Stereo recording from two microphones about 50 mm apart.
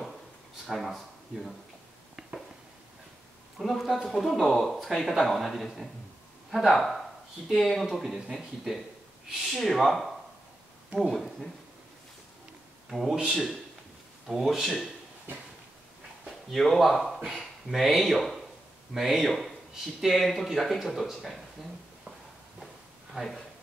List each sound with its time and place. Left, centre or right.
0.7 s speech: centre
3.5 s speech: centre
13.3 s speech: centre
14.6 s speech: centre
16.3 s speech: centre
23.2 s speech: right